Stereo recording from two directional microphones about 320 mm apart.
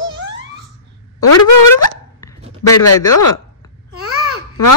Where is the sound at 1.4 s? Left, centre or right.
Left.